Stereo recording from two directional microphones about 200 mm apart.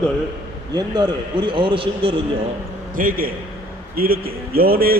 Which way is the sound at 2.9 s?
45° right (ahead or behind).